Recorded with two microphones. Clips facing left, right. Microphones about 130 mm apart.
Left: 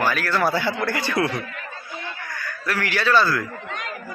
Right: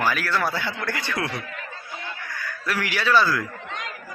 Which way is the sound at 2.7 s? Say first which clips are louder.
Left 1 dB; 10° right (ahead or behind).